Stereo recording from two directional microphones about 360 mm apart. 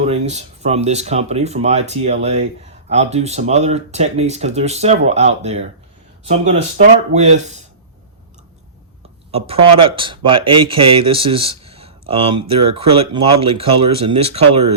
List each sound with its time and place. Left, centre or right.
0.0 s speech: centre
9.3 s speech: centre